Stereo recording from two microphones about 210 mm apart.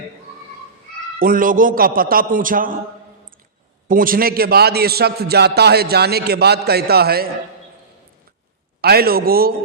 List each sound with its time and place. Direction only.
1.2 s a man's voice: 40° right (ahead or behind)
3.8 s a man's voice: 40° right (ahead or behind)
8.8 s a man's voice: 45° right (ahead or behind)